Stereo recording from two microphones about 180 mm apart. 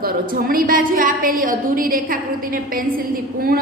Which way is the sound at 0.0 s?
55° right (ahead or behind).